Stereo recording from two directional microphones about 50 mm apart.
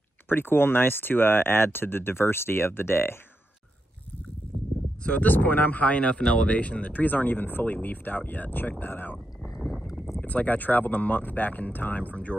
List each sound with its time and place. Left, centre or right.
0.3 s speech: left
5.0 s speech: left
5.3 s speech: left
10.2 s speech: left